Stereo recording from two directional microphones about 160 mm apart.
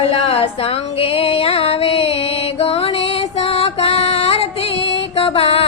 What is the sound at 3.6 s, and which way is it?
Music, 40° left (ahead or behind).